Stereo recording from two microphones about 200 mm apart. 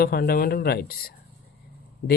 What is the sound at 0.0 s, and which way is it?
Speech, 50° left (ahead or behind).